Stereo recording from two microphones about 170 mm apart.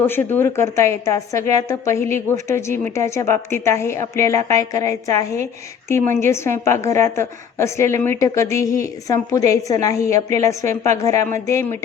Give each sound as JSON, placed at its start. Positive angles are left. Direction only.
{"t": 0.0, "sound": "a woman's voice", "side_deg": 10}